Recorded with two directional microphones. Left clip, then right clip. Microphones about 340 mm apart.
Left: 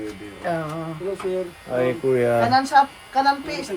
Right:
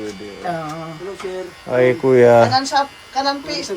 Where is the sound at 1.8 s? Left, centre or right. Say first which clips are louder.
Right 8 dB; centre.